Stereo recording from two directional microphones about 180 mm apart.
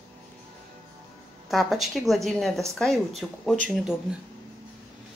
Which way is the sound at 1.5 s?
Centre (ahead or behind).